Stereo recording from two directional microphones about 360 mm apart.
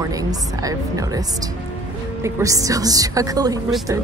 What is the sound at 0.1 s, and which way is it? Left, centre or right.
A woman's voice, centre.